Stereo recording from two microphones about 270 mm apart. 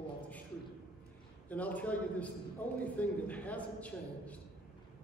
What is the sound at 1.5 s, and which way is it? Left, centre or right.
A man's voice, centre.